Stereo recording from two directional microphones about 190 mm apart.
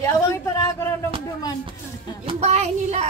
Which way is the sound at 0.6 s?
15° left (ahead or behind).